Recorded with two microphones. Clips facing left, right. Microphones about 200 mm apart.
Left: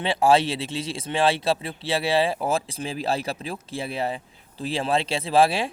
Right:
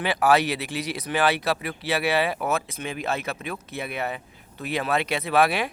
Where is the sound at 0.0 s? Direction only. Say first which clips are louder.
Left 1 dB; 25° left (ahead or behind).